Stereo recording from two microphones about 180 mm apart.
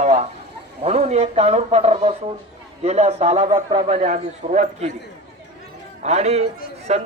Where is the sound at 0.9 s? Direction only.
40° right (ahead or behind).